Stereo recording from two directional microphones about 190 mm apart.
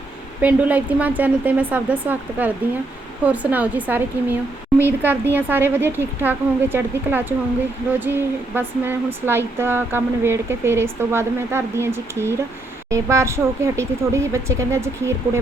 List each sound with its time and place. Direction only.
0.4 s speech: 10° right (ahead or behind)